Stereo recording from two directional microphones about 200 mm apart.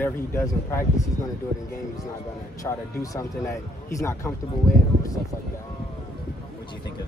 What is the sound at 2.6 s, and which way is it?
Speech, 15° left (ahead or behind).